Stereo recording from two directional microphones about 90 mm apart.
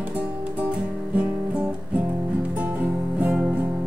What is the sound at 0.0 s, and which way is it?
Music, 15° right (ahead or behind).